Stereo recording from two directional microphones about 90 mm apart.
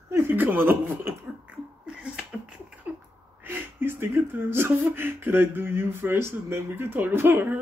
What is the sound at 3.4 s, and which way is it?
Speech, 25° right (ahead or behind).